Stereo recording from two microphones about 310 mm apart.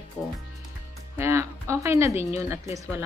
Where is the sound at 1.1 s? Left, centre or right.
Centre.